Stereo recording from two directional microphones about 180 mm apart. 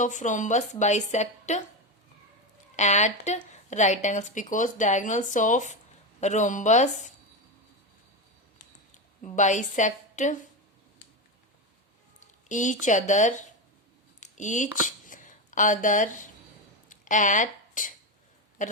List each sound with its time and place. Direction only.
0.0 s a woman's voice: 45° left (ahead or behind)
2.7 s a woman's voice: 40° left (ahead or behind)
9.2 s speech: 45° left (ahead or behind)
12.2 s a sound: 45° left (ahead or behind)
12.8 s speech: 45° left (ahead or behind)
14.2 s a sound: 40° left (ahead or behind)
16.9 s speech: 45° left (ahead or behind)
18.6 s oink: 45° left (ahead or behind)